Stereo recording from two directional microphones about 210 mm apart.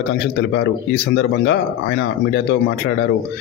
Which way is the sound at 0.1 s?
55° left (ahead or behind).